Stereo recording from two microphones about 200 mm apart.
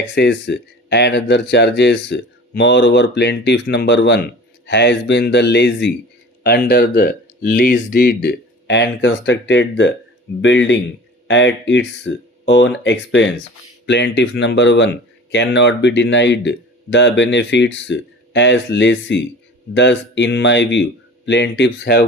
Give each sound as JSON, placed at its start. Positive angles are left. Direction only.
{"t": 0.1, "sound": "speech", "side_deg": 55}
{"t": 6.4, "sound": "speech", "side_deg": 50}